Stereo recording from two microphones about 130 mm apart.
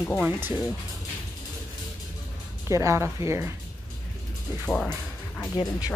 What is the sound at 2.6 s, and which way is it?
Speech, 20° right (ahead or behind).